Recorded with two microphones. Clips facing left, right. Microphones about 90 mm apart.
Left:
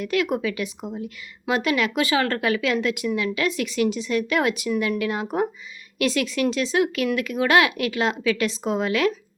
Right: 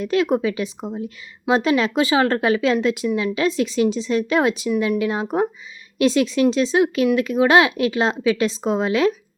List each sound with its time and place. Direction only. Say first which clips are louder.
0.0 s speech: right 4 dB; 25° right (ahead or behind)